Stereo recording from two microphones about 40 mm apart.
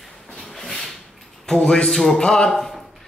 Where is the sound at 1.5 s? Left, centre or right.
Centre.